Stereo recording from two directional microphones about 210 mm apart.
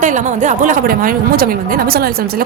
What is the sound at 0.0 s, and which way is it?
Speech, 35° right (ahead or behind).